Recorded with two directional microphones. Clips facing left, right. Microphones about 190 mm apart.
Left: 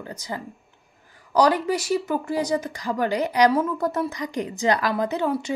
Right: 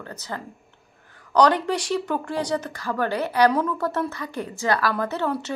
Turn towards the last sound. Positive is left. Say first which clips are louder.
# left 2 dB
turn(degrees=15)  # may be behind; listen again after turning